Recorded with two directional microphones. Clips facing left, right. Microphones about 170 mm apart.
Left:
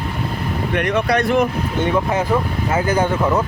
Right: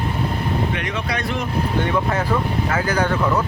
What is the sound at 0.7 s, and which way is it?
Speech, 60° left (ahead or behind).